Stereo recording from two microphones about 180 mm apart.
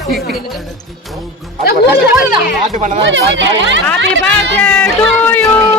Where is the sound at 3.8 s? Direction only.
5° left (ahead or behind).